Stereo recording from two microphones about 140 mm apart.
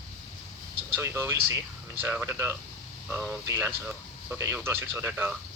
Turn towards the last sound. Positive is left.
turn(degrees=-15)  # may be behind; listen again after turning